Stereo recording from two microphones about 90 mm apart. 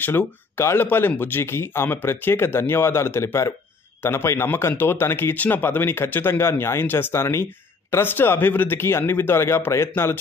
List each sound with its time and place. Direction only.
0.0 s speech: 25° left (ahead or behind)